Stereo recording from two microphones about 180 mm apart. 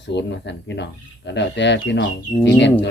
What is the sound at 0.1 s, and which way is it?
Speech, 75° left (ahead or behind).